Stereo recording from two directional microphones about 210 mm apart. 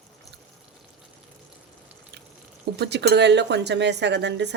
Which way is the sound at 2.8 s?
50° right (ahead or behind).